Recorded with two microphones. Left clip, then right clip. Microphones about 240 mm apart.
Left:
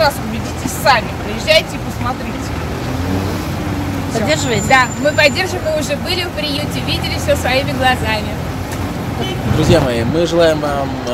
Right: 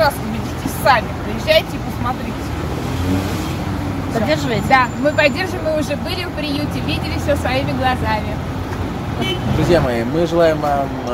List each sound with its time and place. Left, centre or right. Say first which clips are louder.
0.8 s a woman's voice: left 2 dB; centre
4.3 s speech: left 2 dB; centre
9.7 s speech: left 2 dB; centre